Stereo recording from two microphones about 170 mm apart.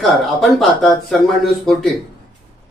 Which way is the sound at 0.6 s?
Centre (ahead or behind).